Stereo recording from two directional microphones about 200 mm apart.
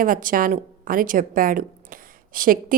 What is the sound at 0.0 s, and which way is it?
A woman's voice, 45° right (ahead or behind).